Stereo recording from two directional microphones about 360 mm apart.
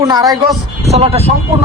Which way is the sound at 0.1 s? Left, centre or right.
Centre.